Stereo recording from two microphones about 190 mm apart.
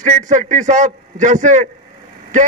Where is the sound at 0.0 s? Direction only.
40° right (ahead or behind).